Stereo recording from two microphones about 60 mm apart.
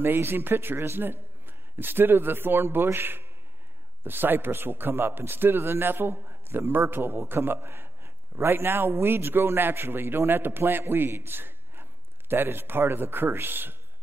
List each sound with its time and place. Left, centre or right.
0.0 s a man's voice: right